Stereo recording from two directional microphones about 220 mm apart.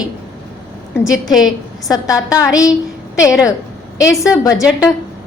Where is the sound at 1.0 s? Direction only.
Centre (ahead or behind).